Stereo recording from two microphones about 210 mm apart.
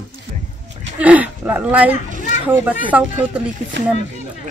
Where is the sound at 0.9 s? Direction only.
5° right (ahead or behind).